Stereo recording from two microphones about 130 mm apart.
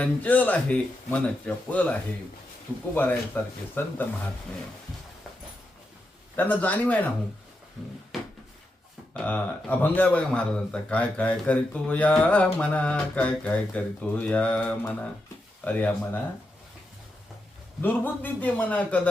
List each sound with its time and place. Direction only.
0.0 s a man's voice: 10° left (ahead or behind)
6.3 s a man's voice: 15° left (ahead or behind)
9.1 s a man's voice: 15° left (ahead or behind)
17.8 s a man's voice: 15° left (ahead or behind)